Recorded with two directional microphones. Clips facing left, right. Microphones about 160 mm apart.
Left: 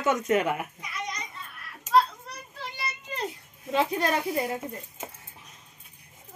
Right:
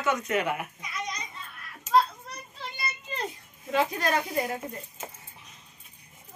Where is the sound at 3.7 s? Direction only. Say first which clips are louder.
Left 1 dB; 25° left (ahead or behind).